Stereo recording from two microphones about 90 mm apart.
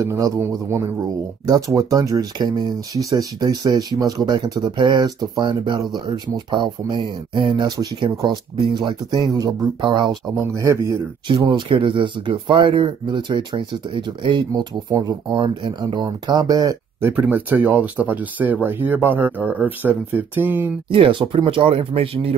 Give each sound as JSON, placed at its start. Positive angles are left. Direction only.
{"t": 0.0, "sound": "a man's voice", "side_deg": -35}
{"t": 10.4, "sound": "a man's voice", "side_deg": -35}
{"t": 11.2, "sound": "speech", "side_deg": -65}
{"t": 14.5, "sound": "speech", "side_deg": -50}
{"t": 17.0, "sound": "speech", "side_deg": -20}
{"t": 20.9, "sound": "speech", "side_deg": -70}